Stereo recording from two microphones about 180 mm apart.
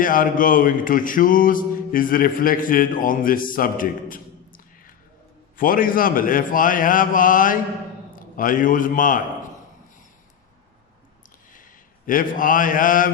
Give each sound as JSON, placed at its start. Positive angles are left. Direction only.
{"t": 0.0, "sound": "a sound", "side_deg": 50}
{"t": 8.1, "sound": "a man's voice", "side_deg": 50}
{"t": 11.5, "sound": "a man's voice", "side_deg": 50}